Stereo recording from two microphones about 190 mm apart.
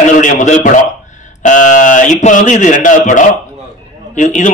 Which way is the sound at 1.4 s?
40° left (ahead or behind).